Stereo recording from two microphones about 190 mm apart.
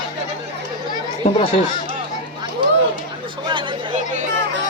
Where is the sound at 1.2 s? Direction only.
35° left (ahead or behind).